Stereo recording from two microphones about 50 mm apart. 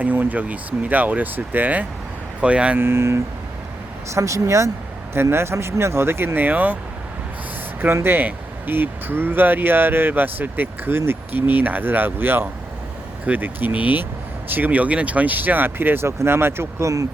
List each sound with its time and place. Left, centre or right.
0.0 s speech: right
2.7 s speech: right
4.1 s speech: right
5.1 s speech: right
8.0 s speech: right
11.3 s speech: right
16.0 s speech: right